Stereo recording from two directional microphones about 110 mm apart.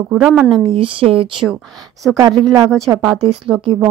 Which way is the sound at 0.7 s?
50° right (ahead or behind).